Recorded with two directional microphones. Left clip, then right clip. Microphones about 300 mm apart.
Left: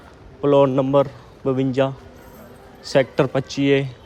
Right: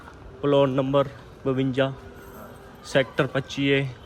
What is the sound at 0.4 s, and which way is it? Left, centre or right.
A man's voice, centre.